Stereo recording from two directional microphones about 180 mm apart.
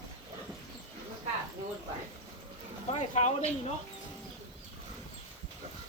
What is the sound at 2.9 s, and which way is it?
Speech, 40° left (ahead or behind).